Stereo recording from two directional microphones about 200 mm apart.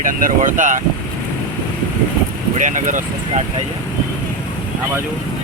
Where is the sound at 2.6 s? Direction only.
40° right (ahead or behind).